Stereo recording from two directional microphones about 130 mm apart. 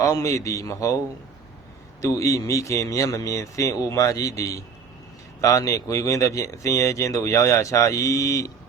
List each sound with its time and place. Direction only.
0.0 s speech: 25° left (ahead or behind)
2.0 s speech: 25° left (ahead or behind)